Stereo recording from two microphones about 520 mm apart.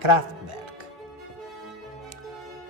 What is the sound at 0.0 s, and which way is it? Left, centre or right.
Music, right.